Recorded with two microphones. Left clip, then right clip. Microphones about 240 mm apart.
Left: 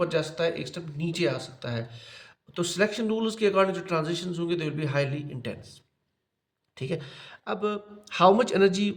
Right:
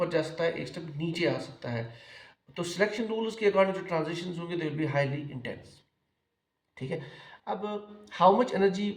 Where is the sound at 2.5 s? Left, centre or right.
Left.